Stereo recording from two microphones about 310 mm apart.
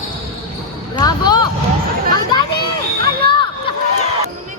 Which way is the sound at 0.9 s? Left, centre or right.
Centre.